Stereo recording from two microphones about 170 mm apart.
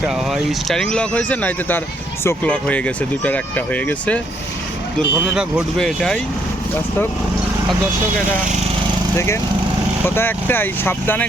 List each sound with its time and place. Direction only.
0.0 s speech: centre (ahead or behind)
4.9 s speech: 5° right (ahead or behind)
9.1 s speech: 15° left (ahead or behind)